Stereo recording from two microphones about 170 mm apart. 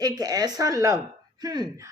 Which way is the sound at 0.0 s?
20° right (ahead or behind).